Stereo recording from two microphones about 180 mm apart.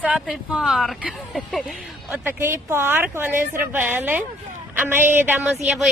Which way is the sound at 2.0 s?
10° right (ahead or behind).